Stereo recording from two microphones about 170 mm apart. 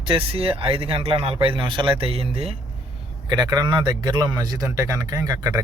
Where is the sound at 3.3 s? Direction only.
25° right (ahead or behind).